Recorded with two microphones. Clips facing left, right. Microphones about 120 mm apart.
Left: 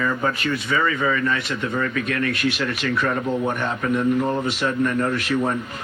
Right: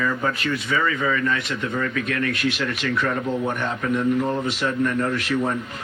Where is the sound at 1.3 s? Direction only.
40° left (ahead or behind).